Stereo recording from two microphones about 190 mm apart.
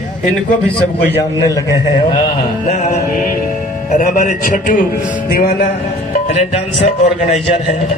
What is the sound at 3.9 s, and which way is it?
A man's voice, 45° left (ahead or behind).